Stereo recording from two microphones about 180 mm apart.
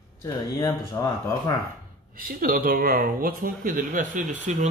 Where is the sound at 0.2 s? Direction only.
15° left (ahead or behind).